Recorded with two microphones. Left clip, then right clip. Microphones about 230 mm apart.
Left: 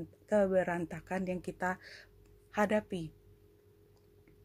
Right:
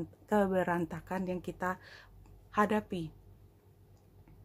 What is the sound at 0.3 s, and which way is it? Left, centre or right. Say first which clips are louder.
Speech: left 1 dB; centre.